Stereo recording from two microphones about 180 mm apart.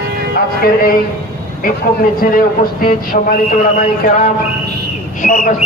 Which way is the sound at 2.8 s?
55° left (ahead or behind).